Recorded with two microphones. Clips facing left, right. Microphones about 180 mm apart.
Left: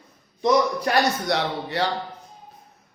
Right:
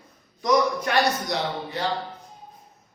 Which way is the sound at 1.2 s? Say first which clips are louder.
Left 3 dB; 70° left (ahead or behind).